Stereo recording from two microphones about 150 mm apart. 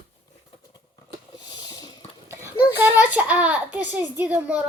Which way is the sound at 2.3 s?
15° right (ahead or behind).